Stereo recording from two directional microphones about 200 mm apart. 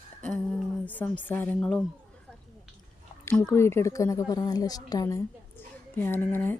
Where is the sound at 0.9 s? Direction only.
10° left (ahead or behind).